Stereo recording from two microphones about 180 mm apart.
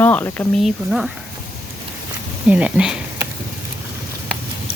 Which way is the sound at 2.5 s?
5° right (ahead or behind).